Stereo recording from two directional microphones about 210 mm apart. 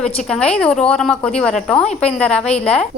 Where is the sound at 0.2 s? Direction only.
5° left (ahead or behind).